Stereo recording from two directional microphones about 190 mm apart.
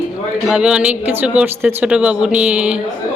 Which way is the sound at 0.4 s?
5° right (ahead or behind).